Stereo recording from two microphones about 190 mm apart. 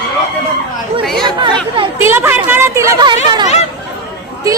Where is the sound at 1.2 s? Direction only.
25° right (ahead or behind).